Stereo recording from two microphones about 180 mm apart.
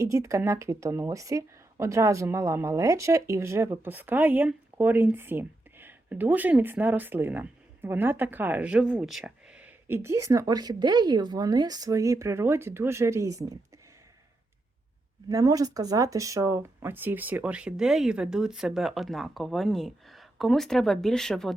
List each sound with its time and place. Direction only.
0.0 s speech: 15° right (ahead or behind)
15.3 s speech: 20° right (ahead or behind); by 21.5 s 5° left (ahead or behind)